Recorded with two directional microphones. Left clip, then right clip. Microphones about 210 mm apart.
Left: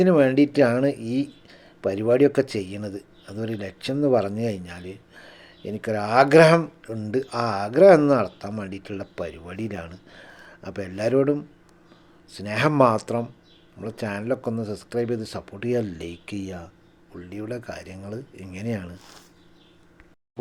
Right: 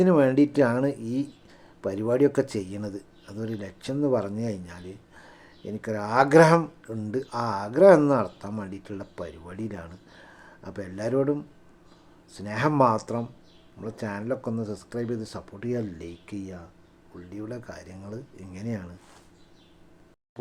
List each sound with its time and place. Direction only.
0.0 s speech: 5° left (ahead or behind)